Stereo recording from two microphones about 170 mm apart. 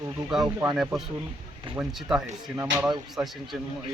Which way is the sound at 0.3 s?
5° right (ahead or behind).